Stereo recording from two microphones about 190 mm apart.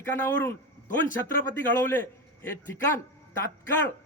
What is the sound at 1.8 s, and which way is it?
Speech, 10° left (ahead or behind).